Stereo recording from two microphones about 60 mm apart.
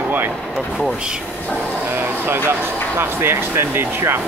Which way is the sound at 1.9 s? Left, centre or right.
Right.